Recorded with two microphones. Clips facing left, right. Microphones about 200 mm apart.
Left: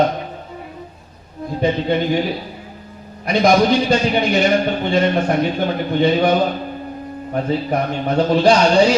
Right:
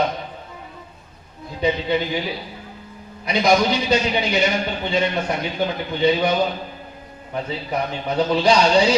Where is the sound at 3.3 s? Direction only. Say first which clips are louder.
Left 4 dB; 55° left (ahead or behind).